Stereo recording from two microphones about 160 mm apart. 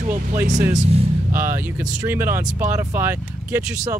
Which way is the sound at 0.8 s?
40° right (ahead or behind).